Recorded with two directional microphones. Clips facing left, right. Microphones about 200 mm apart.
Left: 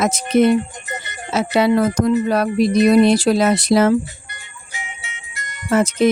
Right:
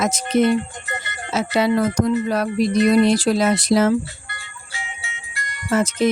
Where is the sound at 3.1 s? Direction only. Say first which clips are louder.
Left 3 dB; 65° left (ahead or behind).